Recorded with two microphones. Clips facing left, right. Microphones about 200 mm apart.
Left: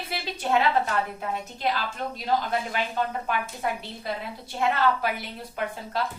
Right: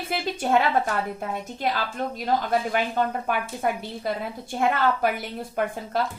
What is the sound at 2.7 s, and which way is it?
A woman's voice, 50° right (ahead or behind).